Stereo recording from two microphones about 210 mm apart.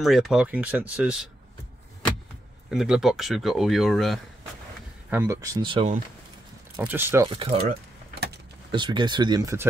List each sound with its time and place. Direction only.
0.0 s speech: centre (ahead or behind)
2.7 s speech: centre (ahead or behind)
5.1 s speech: 15° right (ahead or behind)
6.8 s speech: 10° right (ahead or behind)
7.2 s speech: 25° right (ahead or behind)
8.7 s speech: 20° right (ahead or behind)